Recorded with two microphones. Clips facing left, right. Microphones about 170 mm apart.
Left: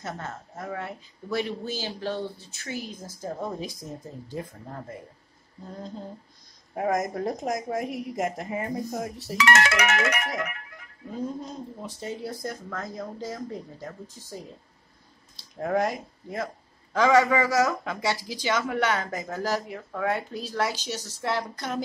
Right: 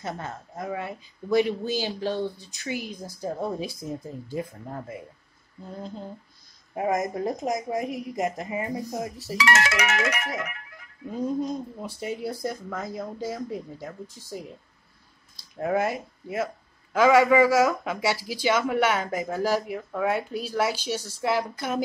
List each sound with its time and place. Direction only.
0.0 s speech: 10° right (ahead or behind)
6.7 s a woman's voice: centre (ahead or behind)
9.4 s music: 60° left (ahead or behind)
11.2 s speech: 10° right (ahead or behind)
15.6 s speech: 5° right (ahead or behind)